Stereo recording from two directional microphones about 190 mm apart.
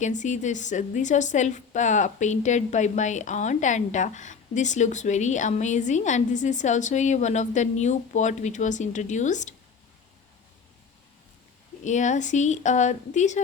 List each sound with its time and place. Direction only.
0.0 s a woman's voice: 40° left (ahead or behind)
11.9 s a woman's voice: 40° left (ahead or behind)